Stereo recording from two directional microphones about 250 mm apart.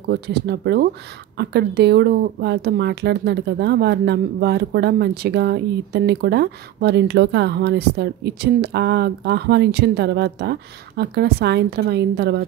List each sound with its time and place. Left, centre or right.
0.1 s speech: right